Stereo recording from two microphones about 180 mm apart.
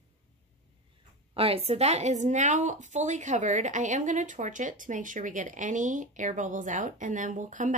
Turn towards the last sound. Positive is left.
turn(degrees=-45)  # may be behind; listen again after turning